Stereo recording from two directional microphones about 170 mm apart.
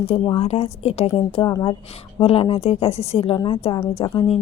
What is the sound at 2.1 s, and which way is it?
A woman's voice, 35° left (ahead or behind).